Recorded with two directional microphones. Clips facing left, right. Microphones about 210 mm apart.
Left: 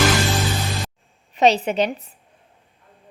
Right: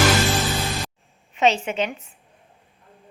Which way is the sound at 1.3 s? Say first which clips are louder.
Left 3 dB; 35° left (ahead or behind).